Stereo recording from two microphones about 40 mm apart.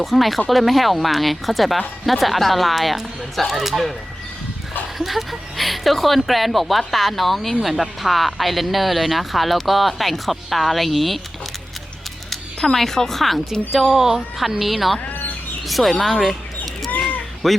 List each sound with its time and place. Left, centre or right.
0.0 s speech: centre
4.9 s speech: centre
12.3 s speech: centre
15.1 s bird: left
15.6 s speech: centre
17.4 s speech: centre